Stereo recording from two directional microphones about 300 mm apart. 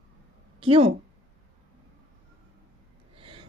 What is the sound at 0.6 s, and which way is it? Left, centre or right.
Speech, centre.